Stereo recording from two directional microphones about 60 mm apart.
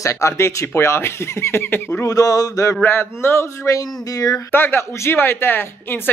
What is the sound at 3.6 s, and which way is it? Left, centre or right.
Speech, left.